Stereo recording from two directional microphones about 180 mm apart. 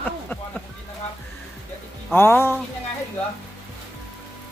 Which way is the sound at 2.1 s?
15° left (ahead or behind).